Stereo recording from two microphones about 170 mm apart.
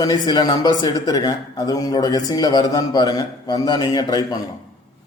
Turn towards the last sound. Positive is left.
turn(degrees=20)  # may be behind; listen again after turning